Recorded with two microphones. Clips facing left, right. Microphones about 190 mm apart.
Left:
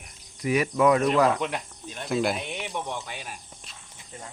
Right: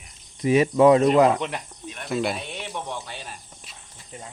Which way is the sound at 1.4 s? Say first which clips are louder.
Even; centre (ahead or behind).